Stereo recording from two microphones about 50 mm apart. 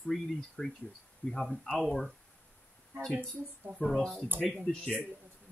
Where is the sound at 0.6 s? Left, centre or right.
Centre.